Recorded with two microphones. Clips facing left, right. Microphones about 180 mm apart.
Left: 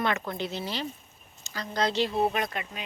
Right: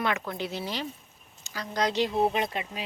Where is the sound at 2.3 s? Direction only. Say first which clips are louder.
Right 2 dB; 25° right (ahead or behind).